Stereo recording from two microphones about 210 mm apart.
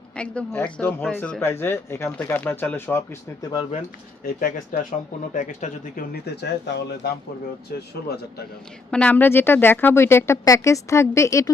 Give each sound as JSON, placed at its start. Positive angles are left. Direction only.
{"t": 0.2, "sound": "speech", "side_deg": 5}
{"t": 3.5, "sound": "speech", "side_deg": 20}
{"t": 4.4, "sound": "speech", "side_deg": 40}
{"t": 8.9, "sound": "speech", "side_deg": 5}